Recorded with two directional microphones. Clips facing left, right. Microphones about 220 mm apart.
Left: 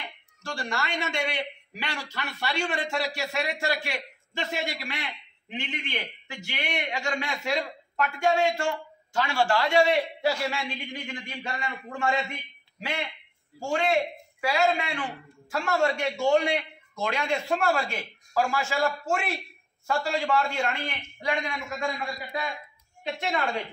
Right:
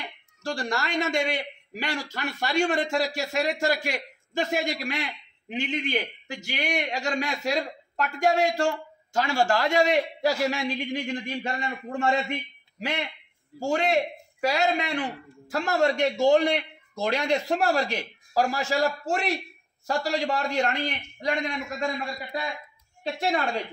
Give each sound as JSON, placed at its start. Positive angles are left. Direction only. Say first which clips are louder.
{"t": 0.4, "sound": "a man's voice", "louder": "right 3 dB", "side_deg": -35}
{"t": 13.6, "sound": "speech", "louder": "right 1 dB", "side_deg": -40}
{"t": 22.2, "sound": "speech", "louder": "right 1 dB", "side_deg": -25}